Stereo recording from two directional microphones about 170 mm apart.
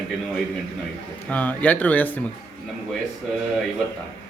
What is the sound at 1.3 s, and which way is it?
Speech, 10° left (ahead or behind).